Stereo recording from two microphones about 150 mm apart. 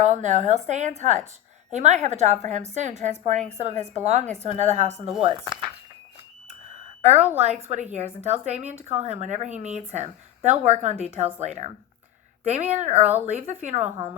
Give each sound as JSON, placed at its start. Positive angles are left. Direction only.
{"t": 0.0, "sound": "speech", "side_deg": -55}
{"t": 6.7, "sound": "a sound", "side_deg": -45}
{"t": 7.3, "sound": "speech", "side_deg": -50}